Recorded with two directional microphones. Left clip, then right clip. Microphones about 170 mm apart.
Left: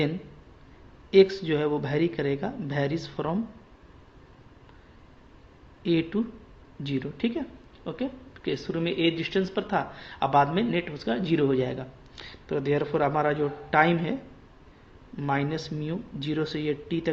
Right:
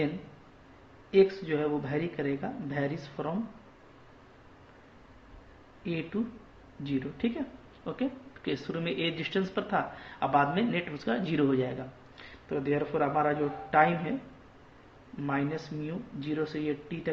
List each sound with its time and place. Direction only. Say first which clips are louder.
1.1 s speech: left 5 dB; 50° left (ahead or behind)
5.8 s speech: left 8 dB; 50° left (ahead or behind)
15.2 s speech: left 4 dB; 45° left (ahead or behind)